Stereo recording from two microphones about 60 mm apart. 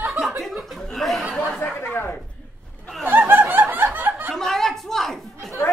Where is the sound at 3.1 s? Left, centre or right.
Right.